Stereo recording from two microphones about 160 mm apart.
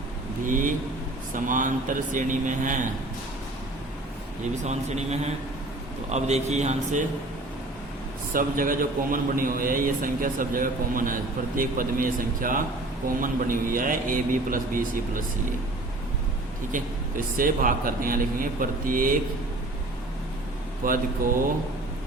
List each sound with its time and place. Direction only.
0.4 s a man's voice: 55° right (ahead or behind)
4.6 s a man's voice: 45° right (ahead or behind)
8.3 s a man's voice: 60° right (ahead or behind)
16.7 s a man's voice: 55° right (ahead or behind)
20.8 s a man's voice: 55° right (ahead or behind)